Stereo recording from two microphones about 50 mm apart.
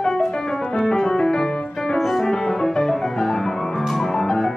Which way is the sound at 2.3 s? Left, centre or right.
Centre.